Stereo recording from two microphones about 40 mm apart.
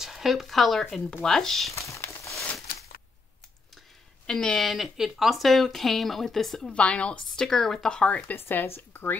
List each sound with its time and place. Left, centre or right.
0.0 s speech: centre
4.3 s a woman's voice: left
4.6 s speech: centre
6.7 s a woman's voice: left
7.2 s speech: centre
8.3 s speech: left